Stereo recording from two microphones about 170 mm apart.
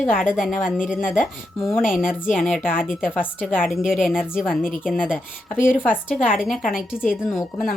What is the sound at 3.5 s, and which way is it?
A woman's voice, 5° right (ahead or behind).